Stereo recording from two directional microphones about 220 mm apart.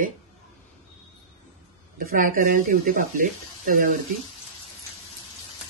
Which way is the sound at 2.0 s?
40° right (ahead or behind).